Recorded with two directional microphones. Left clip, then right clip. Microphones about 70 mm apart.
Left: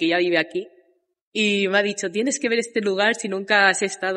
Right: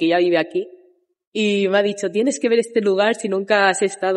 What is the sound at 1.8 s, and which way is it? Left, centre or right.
A woman's voice, right.